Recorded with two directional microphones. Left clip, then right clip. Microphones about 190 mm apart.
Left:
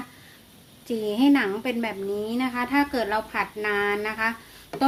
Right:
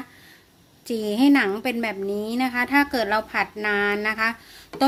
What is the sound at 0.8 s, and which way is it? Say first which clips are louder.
A woman's voice: right 2 dB; 35° right (ahead or behind).